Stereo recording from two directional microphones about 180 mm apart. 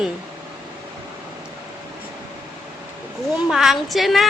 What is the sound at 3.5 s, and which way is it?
Speech, centre (ahead or behind).